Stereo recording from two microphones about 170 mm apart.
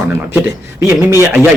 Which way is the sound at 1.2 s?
15° right (ahead or behind).